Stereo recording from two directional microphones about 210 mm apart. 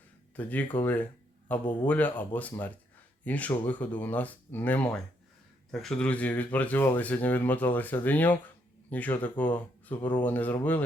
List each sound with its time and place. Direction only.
0.3 s speech: 10° left (ahead or behind)